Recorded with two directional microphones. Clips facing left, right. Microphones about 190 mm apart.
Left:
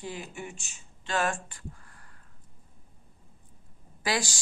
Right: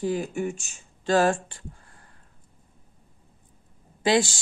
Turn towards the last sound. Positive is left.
turn(degrees=-25)  # may be behind; listen again after turning